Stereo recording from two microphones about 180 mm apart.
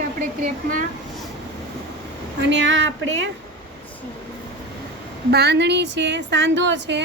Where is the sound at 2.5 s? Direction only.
90° right.